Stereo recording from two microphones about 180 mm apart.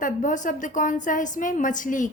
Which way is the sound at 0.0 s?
45° left (ahead or behind).